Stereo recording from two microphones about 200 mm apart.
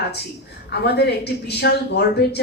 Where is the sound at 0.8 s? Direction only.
55° left (ahead or behind).